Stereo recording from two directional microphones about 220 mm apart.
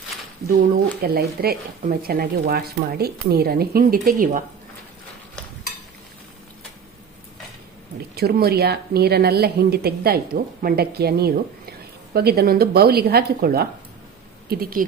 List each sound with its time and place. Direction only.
0.4 s speech: 45° right (ahead or behind)
8.1 s a woman's voice: 45° right (ahead or behind)